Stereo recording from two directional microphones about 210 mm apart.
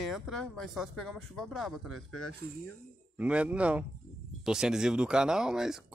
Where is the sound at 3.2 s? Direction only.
5° right (ahead or behind).